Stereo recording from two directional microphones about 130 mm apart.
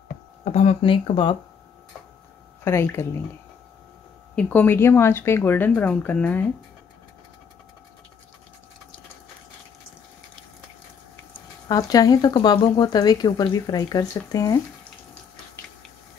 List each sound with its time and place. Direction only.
0.5 s speech: 60° left (ahead or behind)
0.8 s speech: 45° left (ahead or behind)
2.6 s speech: 20° left (ahead or behind)
4.4 s speech: 10° left (ahead or behind)
11.6 s speech: 30° left (ahead or behind)